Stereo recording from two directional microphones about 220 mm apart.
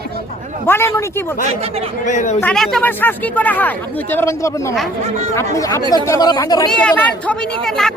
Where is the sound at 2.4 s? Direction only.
Centre (ahead or behind); by 6.7 s 20° left (ahead or behind).